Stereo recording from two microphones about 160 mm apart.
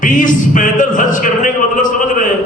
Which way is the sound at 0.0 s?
55° left (ahead or behind).